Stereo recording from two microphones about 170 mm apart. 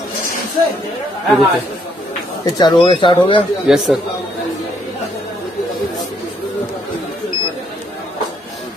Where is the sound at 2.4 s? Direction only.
25° left (ahead or behind).